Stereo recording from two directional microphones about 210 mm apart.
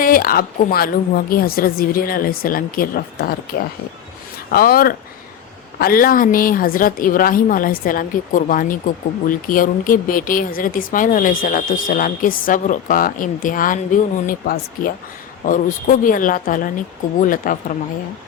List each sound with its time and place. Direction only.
0.0 s a woman's voice: 40° left (ahead or behind)
4.5 s a woman's voice: 45° left (ahead or behind)